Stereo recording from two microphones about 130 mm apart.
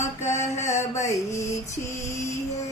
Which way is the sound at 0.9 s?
20° left (ahead or behind).